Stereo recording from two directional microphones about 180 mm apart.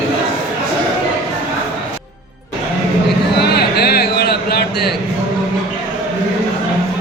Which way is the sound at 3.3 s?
65° left (ahead or behind).